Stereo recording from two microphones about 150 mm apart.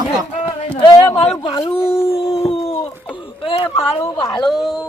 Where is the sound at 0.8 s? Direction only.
35° left (ahead or behind).